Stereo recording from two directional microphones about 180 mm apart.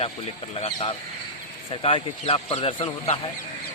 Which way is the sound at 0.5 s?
35° left (ahead or behind).